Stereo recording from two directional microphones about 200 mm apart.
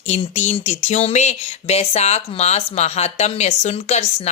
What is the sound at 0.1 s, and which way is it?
Speech, 35° left (ahead or behind).